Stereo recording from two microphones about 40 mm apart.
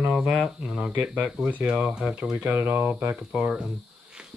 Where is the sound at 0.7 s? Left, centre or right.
Right.